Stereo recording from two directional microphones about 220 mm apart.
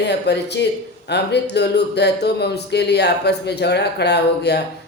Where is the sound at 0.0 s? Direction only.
50° left (ahead or behind).